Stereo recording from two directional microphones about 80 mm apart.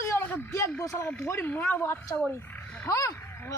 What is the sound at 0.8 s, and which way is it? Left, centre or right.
Speech, left.